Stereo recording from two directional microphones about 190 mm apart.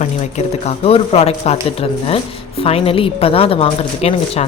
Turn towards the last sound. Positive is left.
turn(degrees=30)  # may be behind; listen again after turning